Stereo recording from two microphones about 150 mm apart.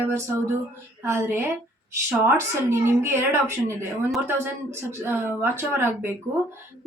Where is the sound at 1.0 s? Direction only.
15° right (ahead or behind).